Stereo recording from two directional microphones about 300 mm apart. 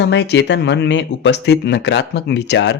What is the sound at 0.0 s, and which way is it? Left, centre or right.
Speech, left.